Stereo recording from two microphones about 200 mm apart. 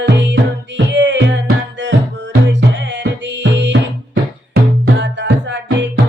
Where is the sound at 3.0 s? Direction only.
60° right (ahead or behind).